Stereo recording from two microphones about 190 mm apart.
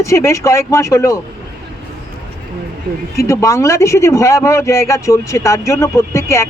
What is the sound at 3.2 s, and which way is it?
Speech, 15° left (ahead or behind).